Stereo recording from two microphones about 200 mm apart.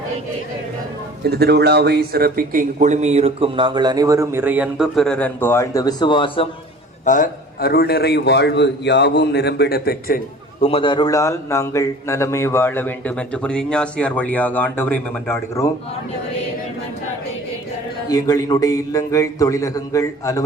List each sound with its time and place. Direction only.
1.2 s speech: 55° right (ahead or behind); by 6.5 s 25° left (ahead or behind)
7.0 s a man's voice: 40° left (ahead or behind)
10.6 s a man's voice: 30° left (ahead or behind); by 15.7 s 15° left (ahead or behind)
18.1 s a man's voice: 20° left (ahead or behind)